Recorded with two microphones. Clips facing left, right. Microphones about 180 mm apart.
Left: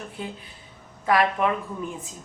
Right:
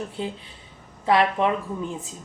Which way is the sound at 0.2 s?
25° right (ahead or behind).